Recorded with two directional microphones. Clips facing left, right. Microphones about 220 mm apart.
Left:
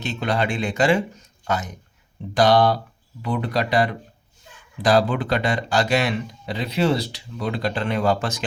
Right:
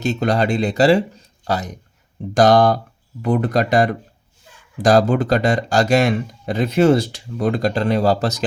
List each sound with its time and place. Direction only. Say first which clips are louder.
0.0 s speech: right 5 dB; 45° right (ahead or behind)